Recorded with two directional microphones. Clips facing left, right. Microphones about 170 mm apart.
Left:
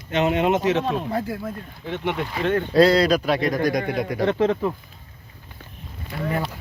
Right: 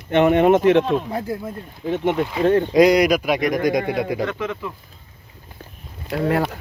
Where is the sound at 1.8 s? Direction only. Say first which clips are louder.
Right 6 dB; 45° right (ahead or behind).